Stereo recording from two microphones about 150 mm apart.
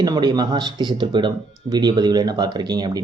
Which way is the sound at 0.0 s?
25° right (ahead or behind).